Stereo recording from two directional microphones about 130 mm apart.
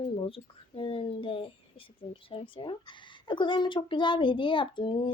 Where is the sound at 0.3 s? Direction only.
45° left (ahead or behind).